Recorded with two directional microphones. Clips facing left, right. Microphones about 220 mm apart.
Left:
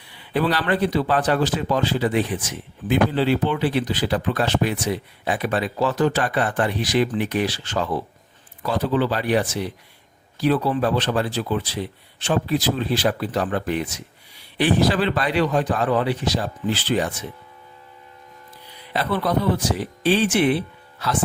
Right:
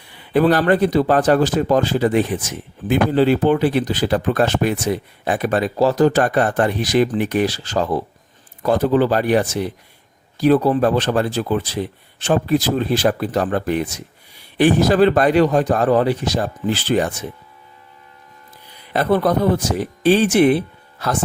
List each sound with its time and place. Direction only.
0.1 s a man's voice: 50° right (ahead or behind)
18.9 s a man's voice: 50° right (ahead or behind)